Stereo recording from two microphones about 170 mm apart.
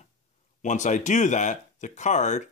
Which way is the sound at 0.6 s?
45° left (ahead or behind).